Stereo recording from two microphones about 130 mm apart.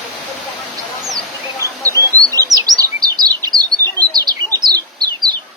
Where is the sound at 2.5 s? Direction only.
30° right (ahead or behind).